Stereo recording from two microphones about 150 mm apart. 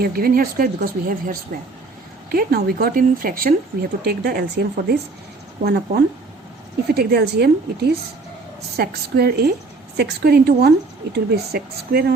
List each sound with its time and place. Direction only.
0.0 s speech: 80° right
2.3 s speech: 90° right; by 3.5 s 70° right (ahead or behind)
4.0 s speech: 90° right